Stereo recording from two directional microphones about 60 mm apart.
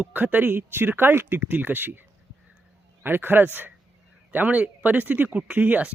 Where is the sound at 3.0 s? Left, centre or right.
Right.